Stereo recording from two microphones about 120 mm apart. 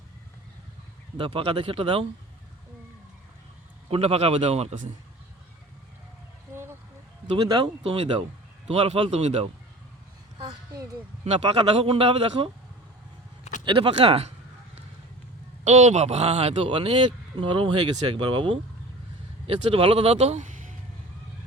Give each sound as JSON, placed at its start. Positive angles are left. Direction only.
{"t": 1.2, "sound": "speech", "side_deg": -50}
{"t": 3.8, "sound": "a man's voice", "side_deg": -55}
{"t": 6.5, "sound": "a sound", "side_deg": -20}
{"t": 7.4, "sound": "speech", "side_deg": -30}
{"t": 8.6, "sound": "a man's voice", "side_deg": -55}
{"t": 11.3, "sound": "a man's voice", "side_deg": -60}
{"t": 13.7, "sound": "a man's voice", "side_deg": -50}
{"t": 15.6, "sound": "speech", "side_deg": -70}